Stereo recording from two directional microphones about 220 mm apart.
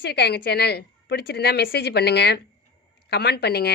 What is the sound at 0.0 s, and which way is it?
Speech, 50° left (ahead or behind).